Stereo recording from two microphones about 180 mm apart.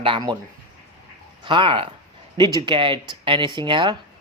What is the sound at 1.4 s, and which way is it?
Speech, 25° right (ahead or behind).